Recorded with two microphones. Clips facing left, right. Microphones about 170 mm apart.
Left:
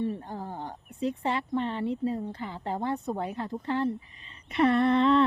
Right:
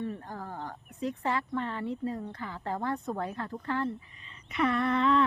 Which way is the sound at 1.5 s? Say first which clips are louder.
Left 4 dB; 25° left (ahead or behind).